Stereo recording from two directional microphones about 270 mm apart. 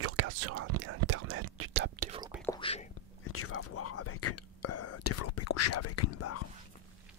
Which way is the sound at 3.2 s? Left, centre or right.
Left.